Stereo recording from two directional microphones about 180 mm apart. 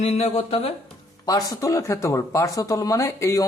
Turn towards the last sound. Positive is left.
turn(degrees=15)  # may be behind; listen again after turning